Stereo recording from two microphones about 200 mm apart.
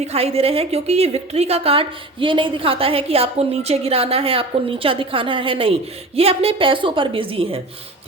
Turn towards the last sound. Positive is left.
turn(degrees=-25)  # may be behind; listen again after turning